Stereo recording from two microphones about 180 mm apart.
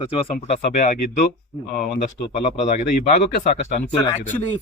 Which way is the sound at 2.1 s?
35° left (ahead or behind).